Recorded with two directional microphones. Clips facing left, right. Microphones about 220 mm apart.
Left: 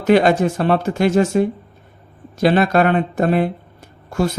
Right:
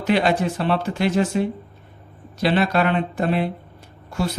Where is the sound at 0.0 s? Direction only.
45° left (ahead or behind).